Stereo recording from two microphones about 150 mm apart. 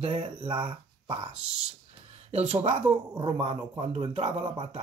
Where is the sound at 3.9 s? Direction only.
45° right (ahead or behind).